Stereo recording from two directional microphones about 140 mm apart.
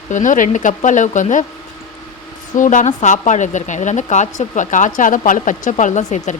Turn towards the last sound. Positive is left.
turn(degrees=55)  # may be behind; listen again after turning